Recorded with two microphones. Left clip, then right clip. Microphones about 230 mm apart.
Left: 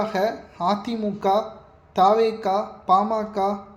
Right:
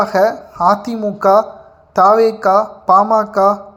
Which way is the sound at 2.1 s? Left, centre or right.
Centre.